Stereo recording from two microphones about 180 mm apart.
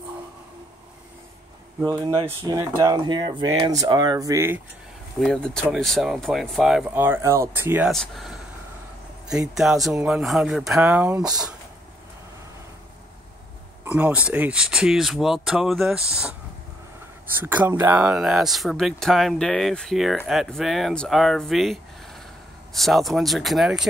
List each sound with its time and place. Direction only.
1.9 s speech: 15° right (ahead or behind)
2.1 s speech: 25° right (ahead or behind)
5.2 s speech: 5° left (ahead or behind)
7.9 s speech: centre (ahead or behind)
9.6 s speech: centre (ahead or behind)
13.8 s speech: 10° right (ahead or behind)
17.4 s speech: 10° right (ahead or behind)
22.8 s speech: centre (ahead or behind)